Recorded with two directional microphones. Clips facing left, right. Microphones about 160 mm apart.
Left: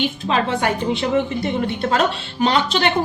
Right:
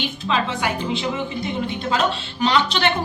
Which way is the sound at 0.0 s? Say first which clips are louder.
Left 3 dB; 50° left (ahead or behind).